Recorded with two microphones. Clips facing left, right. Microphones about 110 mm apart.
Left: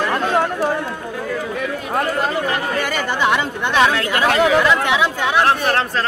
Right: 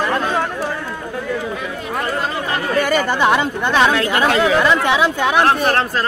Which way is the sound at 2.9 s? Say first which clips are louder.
Right 3 dB; 40° right (ahead or behind).